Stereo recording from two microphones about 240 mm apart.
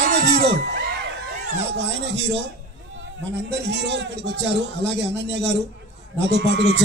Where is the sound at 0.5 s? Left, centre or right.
Right.